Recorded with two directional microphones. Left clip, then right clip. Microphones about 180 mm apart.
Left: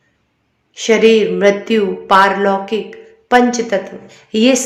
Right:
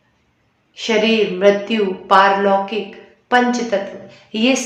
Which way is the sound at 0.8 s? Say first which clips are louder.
Left 5 dB; 30° left (ahead or behind).